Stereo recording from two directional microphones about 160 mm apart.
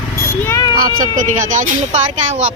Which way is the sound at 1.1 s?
50° right (ahead or behind).